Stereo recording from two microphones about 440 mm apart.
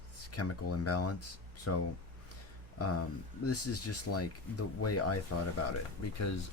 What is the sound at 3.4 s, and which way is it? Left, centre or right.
Speech, left.